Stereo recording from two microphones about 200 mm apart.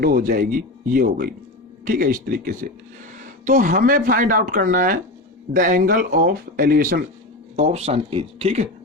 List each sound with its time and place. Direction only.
0.0 s speech: 45° right (ahead or behind)
7.5 s speech: 35° right (ahead or behind)